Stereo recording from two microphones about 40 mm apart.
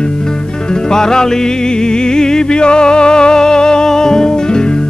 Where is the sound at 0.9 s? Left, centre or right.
Centre.